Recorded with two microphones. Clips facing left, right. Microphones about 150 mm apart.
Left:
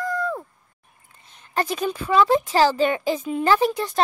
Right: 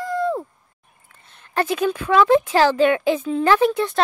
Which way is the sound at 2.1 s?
5° left (ahead or behind).